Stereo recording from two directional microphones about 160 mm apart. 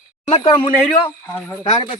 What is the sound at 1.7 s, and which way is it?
Speech, 35° left (ahead or behind).